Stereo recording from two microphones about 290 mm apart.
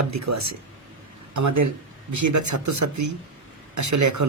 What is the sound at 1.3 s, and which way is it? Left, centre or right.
Speech, right.